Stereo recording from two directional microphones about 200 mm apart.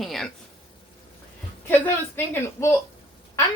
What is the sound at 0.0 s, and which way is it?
Speech, centre (ahead or behind).